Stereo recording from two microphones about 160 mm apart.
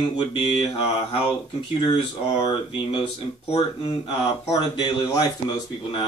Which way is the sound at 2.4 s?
35° left (ahead or behind).